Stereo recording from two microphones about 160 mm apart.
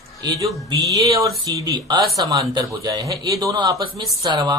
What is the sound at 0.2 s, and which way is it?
Speech, 20° right (ahead or behind).